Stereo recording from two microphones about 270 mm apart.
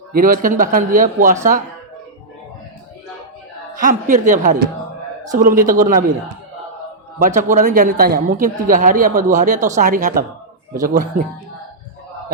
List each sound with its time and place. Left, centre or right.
0.1 s speech: right
3.8 s speech: right
7.2 s speech: right